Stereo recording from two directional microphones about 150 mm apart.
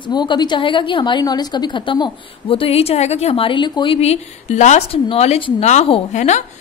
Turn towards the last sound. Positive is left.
turn(degrees=50)  # may be behind; listen again after turning